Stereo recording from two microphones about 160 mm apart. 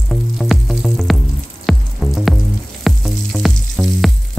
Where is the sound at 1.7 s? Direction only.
Centre (ahead or behind).